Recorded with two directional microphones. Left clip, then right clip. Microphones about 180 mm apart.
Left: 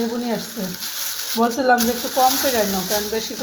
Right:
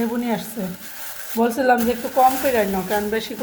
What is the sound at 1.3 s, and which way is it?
Speech, 10° right (ahead or behind).